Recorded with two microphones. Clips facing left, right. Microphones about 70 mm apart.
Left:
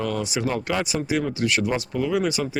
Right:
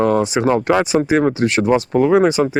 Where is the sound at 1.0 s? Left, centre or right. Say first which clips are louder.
Right 9 dB; right.